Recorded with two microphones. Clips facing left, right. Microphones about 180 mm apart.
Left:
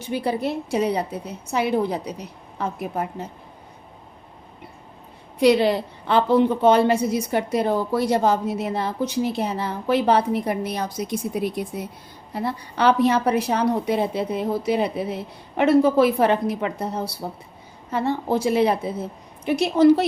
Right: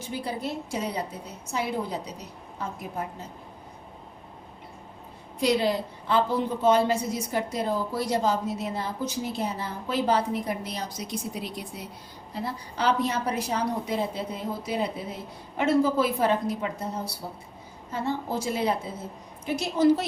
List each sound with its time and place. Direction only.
0.0 s a woman's voice: 65° left (ahead or behind)
5.4 s a woman's voice: 65° left (ahead or behind)
12.3 s a woman's voice: 65° left (ahead or behind)